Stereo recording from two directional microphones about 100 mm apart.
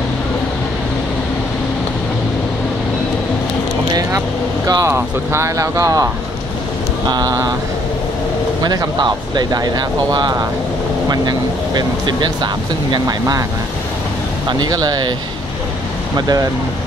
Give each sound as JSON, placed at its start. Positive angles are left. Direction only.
{"t": 4.6, "sound": "speech", "side_deg": -40}
{"t": 4.9, "sound": "speech", "side_deg": -25}
{"t": 7.1, "sound": "speech", "side_deg": -45}
{"t": 8.6, "sound": "speech", "side_deg": -45}
{"t": 14.5, "sound": "speech", "side_deg": -40}
{"t": 16.2, "sound": "speech", "side_deg": -40}